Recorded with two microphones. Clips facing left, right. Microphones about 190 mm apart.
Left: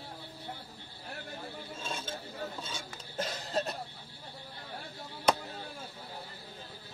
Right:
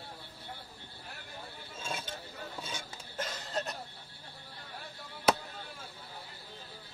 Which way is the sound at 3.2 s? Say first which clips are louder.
Left 3 dB; 30° left (ahead or behind).